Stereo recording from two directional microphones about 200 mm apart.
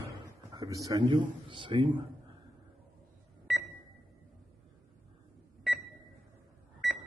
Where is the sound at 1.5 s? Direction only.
25° right (ahead or behind).